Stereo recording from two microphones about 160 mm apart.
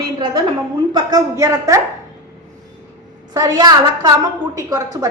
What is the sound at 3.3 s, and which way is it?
A woman's voice, 25° right (ahead or behind).